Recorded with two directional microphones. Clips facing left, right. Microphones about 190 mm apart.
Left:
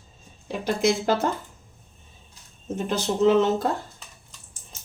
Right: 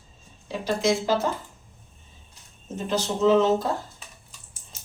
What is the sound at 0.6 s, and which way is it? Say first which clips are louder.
Speech: left 1 dB; 55° left (ahead or behind).